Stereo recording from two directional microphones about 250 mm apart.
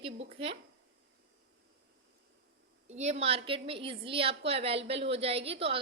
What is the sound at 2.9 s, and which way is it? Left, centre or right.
A woman's voice, right.